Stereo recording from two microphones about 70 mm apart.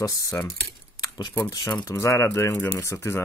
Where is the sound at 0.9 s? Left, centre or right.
Left.